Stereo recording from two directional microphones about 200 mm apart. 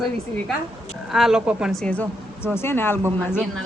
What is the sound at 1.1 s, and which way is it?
Speech, centre (ahead or behind).